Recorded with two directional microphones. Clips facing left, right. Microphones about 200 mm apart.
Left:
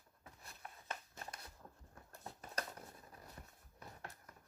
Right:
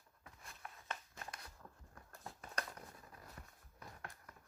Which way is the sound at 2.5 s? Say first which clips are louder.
Left 1 dB; 30° left (ahead or behind).